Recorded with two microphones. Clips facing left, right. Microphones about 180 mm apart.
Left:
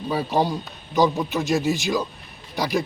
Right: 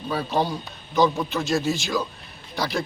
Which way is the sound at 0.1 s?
15° left (ahead or behind).